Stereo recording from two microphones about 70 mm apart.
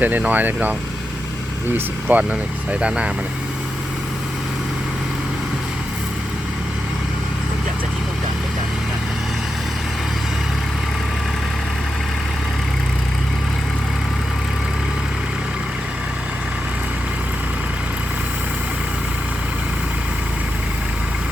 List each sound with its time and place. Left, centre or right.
0.0 s speech: right
1.7 s speech: right